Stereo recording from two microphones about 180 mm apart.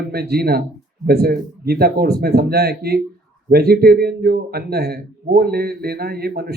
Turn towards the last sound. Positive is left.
turn(degrees=-60)  # may be behind; listen again after turning